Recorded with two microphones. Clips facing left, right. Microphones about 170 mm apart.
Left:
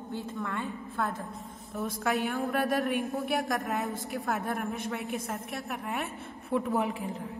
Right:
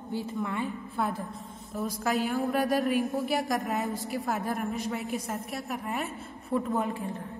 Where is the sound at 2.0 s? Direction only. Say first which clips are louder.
Right 2 dB; centre (ahead or behind).